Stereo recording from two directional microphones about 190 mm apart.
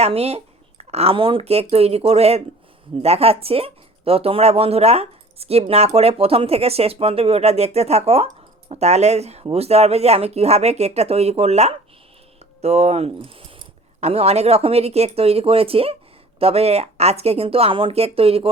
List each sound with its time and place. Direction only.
0.0 s speech: 35° right (ahead or behind)